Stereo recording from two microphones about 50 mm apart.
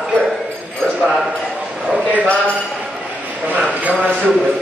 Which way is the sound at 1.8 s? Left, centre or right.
Right.